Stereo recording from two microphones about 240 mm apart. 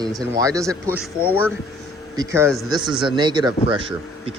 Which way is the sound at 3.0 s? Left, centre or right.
Centre.